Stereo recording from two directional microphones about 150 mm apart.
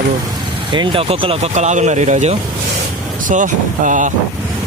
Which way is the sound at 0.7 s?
30° right (ahead or behind).